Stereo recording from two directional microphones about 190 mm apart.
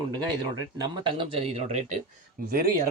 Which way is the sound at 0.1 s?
20° right (ahead or behind).